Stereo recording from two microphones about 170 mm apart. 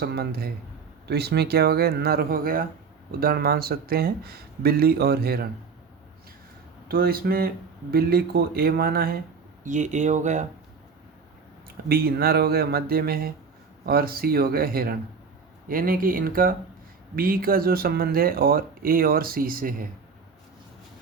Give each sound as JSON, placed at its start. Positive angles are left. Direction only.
{"t": 0.0, "sound": "speech", "side_deg": -70}
{"t": 6.8, "sound": "speech", "side_deg": -65}
{"t": 9.6, "sound": "speech", "side_deg": -45}
{"t": 11.9, "sound": "speech", "side_deg": -65}